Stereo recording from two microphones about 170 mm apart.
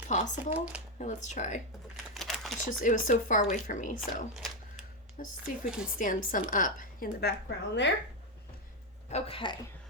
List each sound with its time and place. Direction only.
0.1 s a woman's voice: 45° left (ahead or behind)
2.1 s crumpling: centre (ahead or behind)
2.8 s a woman's voice: 50° left (ahead or behind)
5.6 s a woman's voice: 5° right (ahead or behind)
6.0 s a woman's voice: 50° left (ahead or behind); by 7.9 s 85° left
9.0 s speech: 35° left (ahead or behind)